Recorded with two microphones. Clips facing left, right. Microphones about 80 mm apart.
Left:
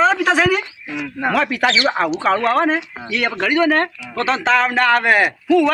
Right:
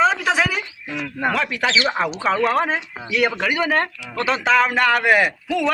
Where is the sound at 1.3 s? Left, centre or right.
Centre.